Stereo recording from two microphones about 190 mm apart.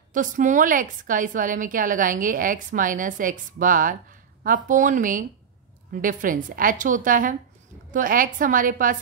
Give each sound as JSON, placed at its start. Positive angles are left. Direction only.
{"t": 0.1, "sound": "a woman's voice", "side_deg": -40}